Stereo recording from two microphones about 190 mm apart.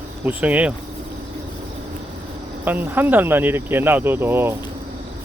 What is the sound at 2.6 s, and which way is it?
Speech, 10° right (ahead or behind).